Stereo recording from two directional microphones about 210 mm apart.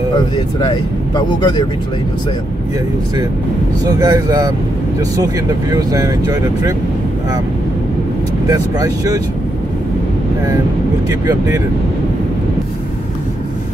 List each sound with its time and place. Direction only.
0.6 s speech: 20° left (ahead or behind)
4.0 s speech: 15° right (ahead or behind)
5.7 s speech: 20° right (ahead or behind)
8.5 s speech: 15° right (ahead or behind)
11.1 s speech: 15° right (ahead or behind)